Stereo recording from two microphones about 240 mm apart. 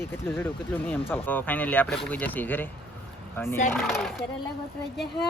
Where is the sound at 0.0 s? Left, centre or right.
Centre.